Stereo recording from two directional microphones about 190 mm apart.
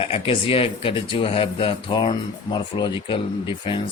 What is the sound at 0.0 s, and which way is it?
Speech, 30° left (ahead or behind).